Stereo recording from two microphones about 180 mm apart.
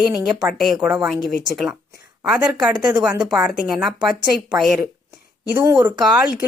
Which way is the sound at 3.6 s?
Centre (ahead or behind).